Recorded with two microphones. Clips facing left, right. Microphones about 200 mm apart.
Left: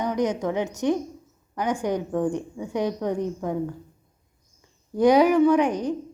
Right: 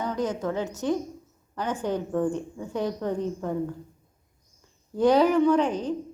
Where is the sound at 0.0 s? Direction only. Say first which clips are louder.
Left 3 dB; 15° left (ahead or behind).